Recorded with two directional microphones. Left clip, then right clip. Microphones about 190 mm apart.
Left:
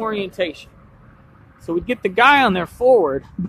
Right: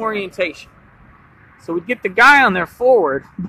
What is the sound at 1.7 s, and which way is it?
Speech, centre (ahead or behind).